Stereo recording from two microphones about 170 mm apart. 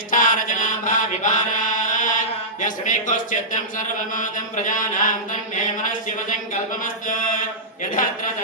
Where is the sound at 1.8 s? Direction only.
50° left (ahead or behind).